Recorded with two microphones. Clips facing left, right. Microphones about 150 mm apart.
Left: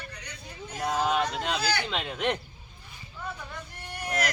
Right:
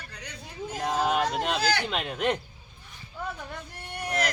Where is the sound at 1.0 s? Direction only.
5° right (ahead or behind).